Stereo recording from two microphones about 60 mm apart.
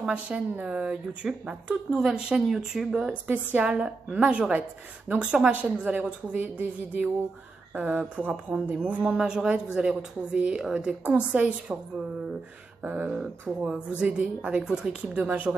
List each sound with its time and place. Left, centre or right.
0.1 s speech: centre
2.9 s a woman's voice: centre
9.1 s speech: centre
12.8 s a woman's voice: right
14.6 s speech: centre